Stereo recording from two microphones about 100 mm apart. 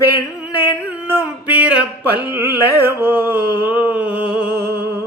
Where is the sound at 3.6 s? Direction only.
15° right (ahead or behind).